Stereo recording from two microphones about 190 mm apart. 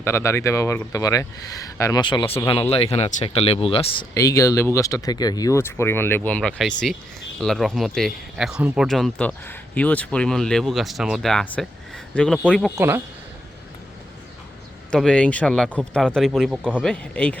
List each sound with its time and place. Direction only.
0.0 s speech: 15° left (ahead or behind); by 4.0 s 30° left (ahead or behind)
4.1 s speech: 15° left (ahead or behind); by 12.7 s centre (ahead or behind)
12.7 s speech: 10° right (ahead or behind)
14.8 s speech: 5° left (ahead or behind)